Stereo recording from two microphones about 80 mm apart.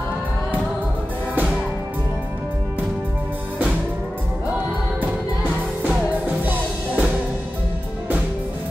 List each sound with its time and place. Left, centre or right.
1.3 s music: centre
5.9 s music: right